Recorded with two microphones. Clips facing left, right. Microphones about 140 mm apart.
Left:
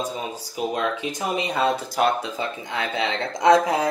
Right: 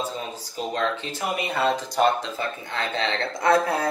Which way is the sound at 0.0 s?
10° left (ahead or behind).